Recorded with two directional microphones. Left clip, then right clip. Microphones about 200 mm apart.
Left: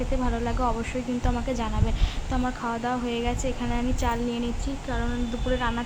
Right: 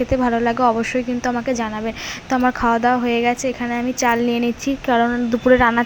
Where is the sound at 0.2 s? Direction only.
25° right (ahead or behind).